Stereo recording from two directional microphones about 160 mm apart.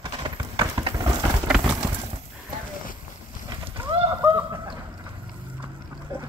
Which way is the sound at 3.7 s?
35° right (ahead or behind).